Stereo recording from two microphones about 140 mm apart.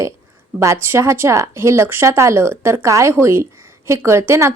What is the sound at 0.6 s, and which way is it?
Speech, 20° right (ahead or behind).